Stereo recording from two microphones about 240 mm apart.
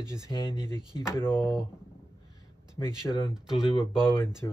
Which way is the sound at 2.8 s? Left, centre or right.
Centre.